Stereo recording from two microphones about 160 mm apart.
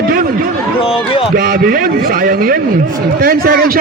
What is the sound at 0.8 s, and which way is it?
Speech, 35° left (ahead or behind).